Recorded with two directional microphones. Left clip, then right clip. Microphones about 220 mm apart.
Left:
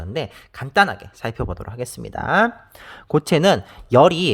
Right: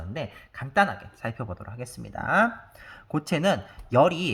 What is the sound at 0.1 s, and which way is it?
Speech, 50° left (ahead or behind).